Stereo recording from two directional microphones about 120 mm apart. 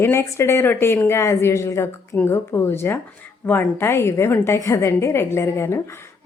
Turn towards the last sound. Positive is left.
turn(degrees=20)  # may be behind; listen again after turning